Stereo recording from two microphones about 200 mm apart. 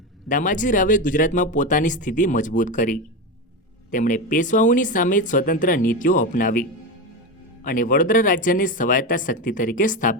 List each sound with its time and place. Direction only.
0.3 s speech: 40° left (ahead or behind)